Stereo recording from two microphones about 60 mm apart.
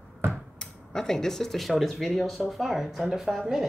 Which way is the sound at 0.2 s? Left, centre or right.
Right.